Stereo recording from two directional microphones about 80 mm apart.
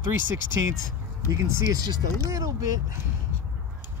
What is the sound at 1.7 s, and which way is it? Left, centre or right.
Speech, right.